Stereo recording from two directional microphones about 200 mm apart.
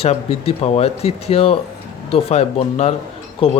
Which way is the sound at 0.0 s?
30° left (ahead or behind).